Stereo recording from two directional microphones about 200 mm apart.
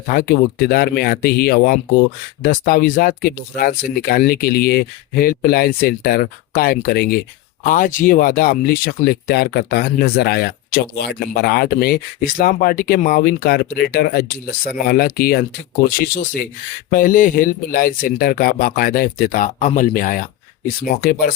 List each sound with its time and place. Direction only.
0.1 s speech: 50° left (ahead or behind)
16.9 s speech: 45° left (ahead or behind)